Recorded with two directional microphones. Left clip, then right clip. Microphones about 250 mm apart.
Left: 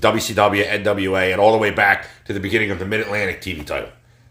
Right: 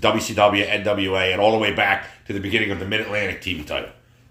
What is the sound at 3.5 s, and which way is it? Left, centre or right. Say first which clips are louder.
Speech: right 1 dB; left.